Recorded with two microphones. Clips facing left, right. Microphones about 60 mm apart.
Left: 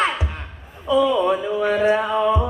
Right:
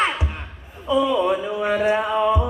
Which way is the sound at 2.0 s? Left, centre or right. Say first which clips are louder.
Even; centre.